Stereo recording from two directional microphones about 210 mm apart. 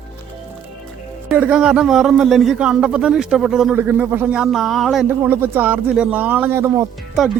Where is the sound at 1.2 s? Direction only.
5° right (ahead or behind).